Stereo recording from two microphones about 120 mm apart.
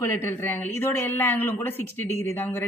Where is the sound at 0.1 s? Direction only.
20° left (ahead or behind).